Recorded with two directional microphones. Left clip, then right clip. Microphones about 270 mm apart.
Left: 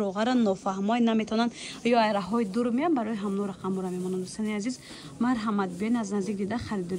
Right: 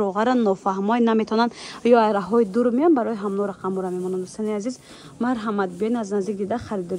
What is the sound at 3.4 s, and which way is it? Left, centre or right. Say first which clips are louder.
Speech: right 7 dB; right.